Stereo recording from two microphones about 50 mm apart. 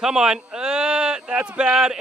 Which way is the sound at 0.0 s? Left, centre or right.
Centre.